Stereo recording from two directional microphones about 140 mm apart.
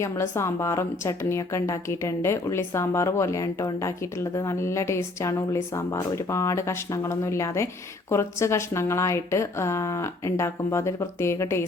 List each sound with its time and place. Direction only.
0.0 s a woman's voice: 20° left (ahead or behind)